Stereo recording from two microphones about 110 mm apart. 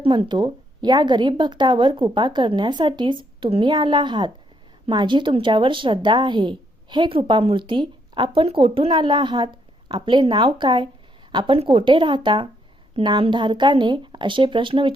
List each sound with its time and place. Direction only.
0.0 s a woman's voice: 50° right (ahead or behind)